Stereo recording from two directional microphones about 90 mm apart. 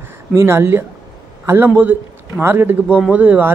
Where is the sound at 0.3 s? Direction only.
30° right (ahead or behind).